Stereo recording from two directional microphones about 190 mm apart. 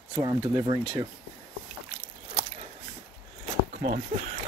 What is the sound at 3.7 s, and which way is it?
Speech, 35° right (ahead or behind).